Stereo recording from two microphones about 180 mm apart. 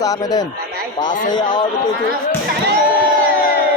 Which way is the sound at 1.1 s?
45° left (ahead or behind).